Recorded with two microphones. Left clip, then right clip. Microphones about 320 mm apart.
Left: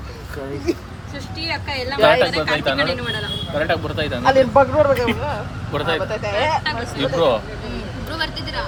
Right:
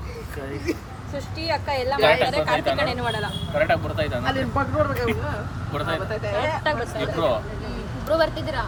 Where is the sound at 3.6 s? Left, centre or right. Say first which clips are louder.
Even; centre.